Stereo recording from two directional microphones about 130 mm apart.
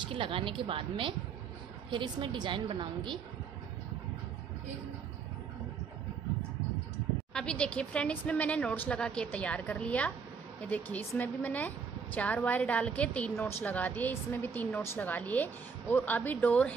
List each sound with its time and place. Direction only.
0.0 s a woman's voice: 40° right (ahead or behind)
7.3 s a woman's voice: 5° left (ahead or behind)